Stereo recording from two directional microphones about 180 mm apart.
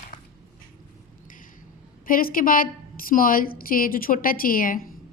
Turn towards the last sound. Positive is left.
turn(degrees=50)  # may be behind; listen again after turning